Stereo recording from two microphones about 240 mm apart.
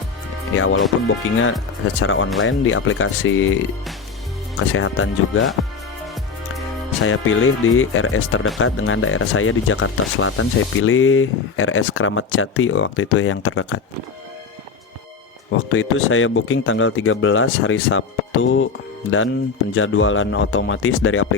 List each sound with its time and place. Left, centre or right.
0.5 s speech: left
4.7 s speech: left
7.0 s speech: left
15.7 s speech: left
19.7 s speech: left